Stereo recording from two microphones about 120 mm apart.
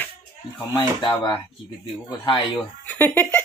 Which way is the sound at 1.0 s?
35° left (ahead or behind).